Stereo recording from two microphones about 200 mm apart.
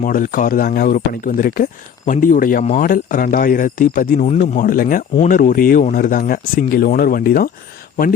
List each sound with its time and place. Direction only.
0.0 s speech: 45° left (ahead or behind)